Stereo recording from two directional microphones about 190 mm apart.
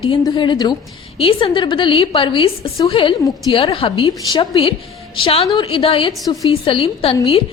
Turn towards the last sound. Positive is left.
turn(degrees=25)  # may be behind; listen again after turning